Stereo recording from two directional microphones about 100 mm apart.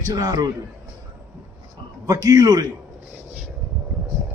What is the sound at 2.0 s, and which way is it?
Speech, 35° right (ahead or behind).